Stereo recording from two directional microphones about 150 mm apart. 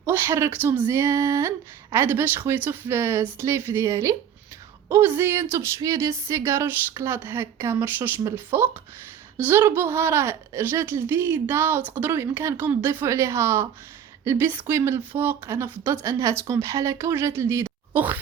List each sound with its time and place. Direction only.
0.0 s a woman's voice: 15° right (ahead or behind)